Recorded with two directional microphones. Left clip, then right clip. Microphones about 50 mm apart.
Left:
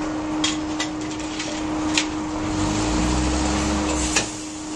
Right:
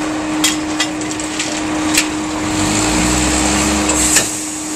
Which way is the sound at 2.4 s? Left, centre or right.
Right.